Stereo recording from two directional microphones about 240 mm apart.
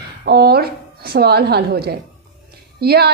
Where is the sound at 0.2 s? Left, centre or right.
Right.